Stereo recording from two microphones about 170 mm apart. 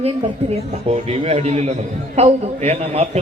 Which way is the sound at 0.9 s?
35° right (ahead or behind).